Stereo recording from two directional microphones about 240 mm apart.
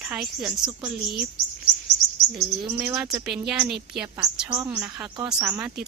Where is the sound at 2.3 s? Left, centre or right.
Centre.